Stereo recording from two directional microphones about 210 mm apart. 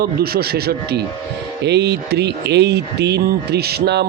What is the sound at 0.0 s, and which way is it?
Speech, 45° right (ahead or behind).